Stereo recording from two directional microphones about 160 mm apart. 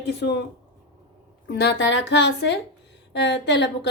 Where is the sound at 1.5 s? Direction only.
90° left.